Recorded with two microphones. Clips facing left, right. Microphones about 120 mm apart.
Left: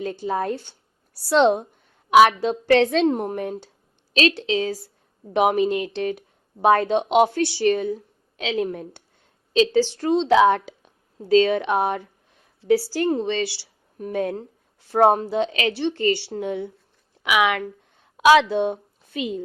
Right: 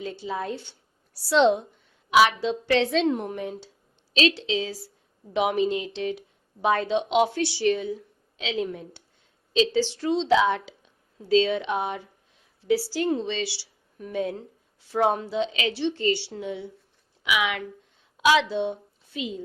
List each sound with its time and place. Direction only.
0.0 s a woman's voice: 50° left (ahead or behind)